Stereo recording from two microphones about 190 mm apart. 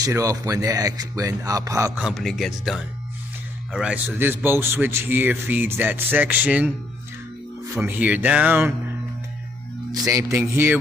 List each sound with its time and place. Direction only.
0.0 s a man's voice: 15° right (ahead or behind)
2.0 s a man's voice: centre (ahead or behind)
7.7 s a man's voice: 10° right (ahead or behind)
10.0 s a man's voice: 15° right (ahead or behind)